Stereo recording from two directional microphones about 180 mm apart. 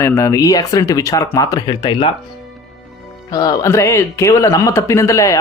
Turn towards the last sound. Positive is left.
turn(degrees=15)  # may be behind; listen again after turning